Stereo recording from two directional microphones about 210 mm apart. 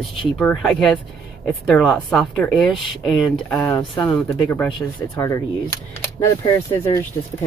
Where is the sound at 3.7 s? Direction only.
20° left (ahead or behind).